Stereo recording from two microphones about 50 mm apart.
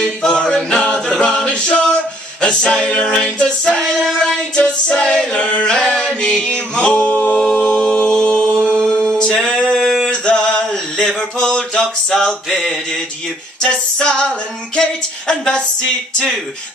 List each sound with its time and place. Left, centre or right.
0.0 s a capella: centre
2.4 s singing: centre
6.2 s music: centre
7.3 s a capella: centre
8.1 s mantra: centre
9.5 s a sound: centre
10.0 s a sound: centre
12.4 s mantra: centre
13.6 s music: left
14.8 s a sound: centre